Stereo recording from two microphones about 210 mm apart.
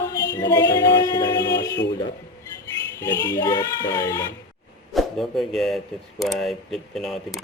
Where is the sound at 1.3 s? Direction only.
55° left (ahead or behind).